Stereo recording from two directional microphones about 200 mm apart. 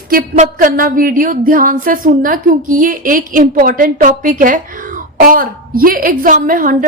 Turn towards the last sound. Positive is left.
turn(degrees=-45)  # may be behind; listen again after turning